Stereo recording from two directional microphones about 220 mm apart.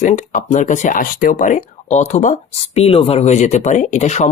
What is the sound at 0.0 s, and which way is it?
Speech, 35° left (ahead or behind).